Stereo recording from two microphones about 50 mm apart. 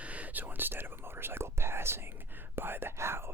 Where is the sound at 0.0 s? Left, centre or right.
Right.